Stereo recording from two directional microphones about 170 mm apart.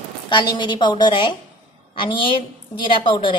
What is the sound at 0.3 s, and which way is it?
A woman's voice, 25° left (ahead or behind).